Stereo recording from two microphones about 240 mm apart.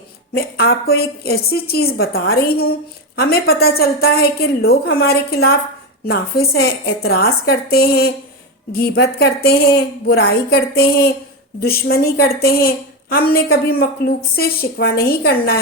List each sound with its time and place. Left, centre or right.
0.3 s a woman's voice: left